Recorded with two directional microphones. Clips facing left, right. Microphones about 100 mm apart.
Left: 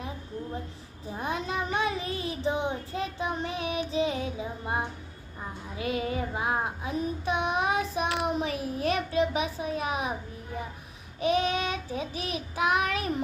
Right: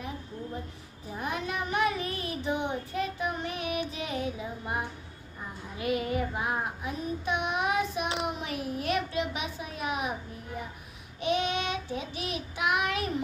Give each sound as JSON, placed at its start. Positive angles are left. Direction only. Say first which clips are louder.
{"t": 1.2, "sound": "child singing", "louder": "left 2 dB", "side_deg": 30}
{"t": 11.2, "sound": "child singing", "louder": "left 3 dB", "side_deg": 35}